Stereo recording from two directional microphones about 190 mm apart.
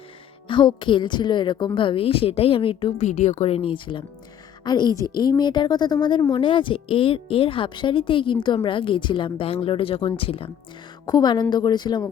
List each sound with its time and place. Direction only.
0.4 s a woman's voice: 25° left (ahead or behind)